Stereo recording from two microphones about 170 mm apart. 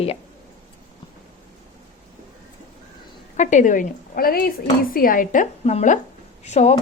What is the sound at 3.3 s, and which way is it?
A woman's voice, 45° left (ahead or behind).